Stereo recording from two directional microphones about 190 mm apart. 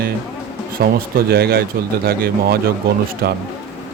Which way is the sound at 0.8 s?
50° right (ahead or behind).